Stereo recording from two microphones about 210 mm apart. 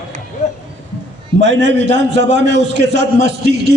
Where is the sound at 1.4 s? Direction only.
55° right (ahead or behind).